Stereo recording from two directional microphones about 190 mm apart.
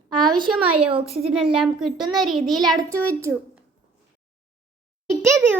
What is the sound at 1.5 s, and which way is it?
A child's voice, centre (ahead or behind).